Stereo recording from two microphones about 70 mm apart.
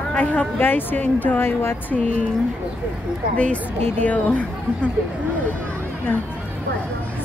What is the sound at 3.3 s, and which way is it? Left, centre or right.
A woman's voice, centre.